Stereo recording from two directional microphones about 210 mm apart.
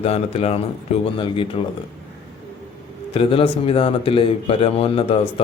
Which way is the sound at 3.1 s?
25° left (ahead or behind).